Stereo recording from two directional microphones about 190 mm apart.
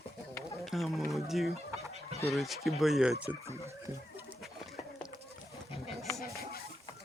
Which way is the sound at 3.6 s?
15° right (ahead or behind).